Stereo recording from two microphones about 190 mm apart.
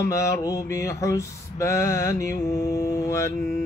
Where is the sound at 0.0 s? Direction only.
15° left (ahead or behind).